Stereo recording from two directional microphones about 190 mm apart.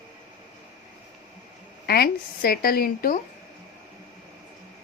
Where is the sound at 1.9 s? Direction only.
55° left (ahead or behind).